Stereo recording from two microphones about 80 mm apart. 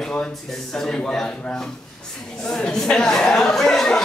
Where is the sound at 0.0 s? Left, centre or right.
Centre.